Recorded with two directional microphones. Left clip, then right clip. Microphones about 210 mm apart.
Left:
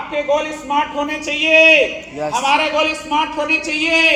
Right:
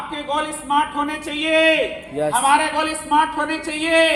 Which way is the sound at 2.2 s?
40° right (ahead or behind).